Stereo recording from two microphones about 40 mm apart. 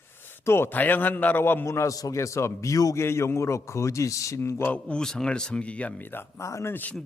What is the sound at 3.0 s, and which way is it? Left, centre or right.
Speech, left.